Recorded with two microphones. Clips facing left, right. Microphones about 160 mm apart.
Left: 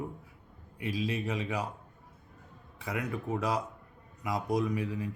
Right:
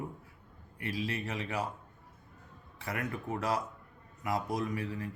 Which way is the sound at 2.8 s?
15° left (ahead or behind).